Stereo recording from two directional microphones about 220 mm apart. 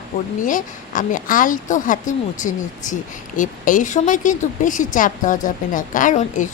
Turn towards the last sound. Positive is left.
turn(degrees=35)  # may be behind; listen again after turning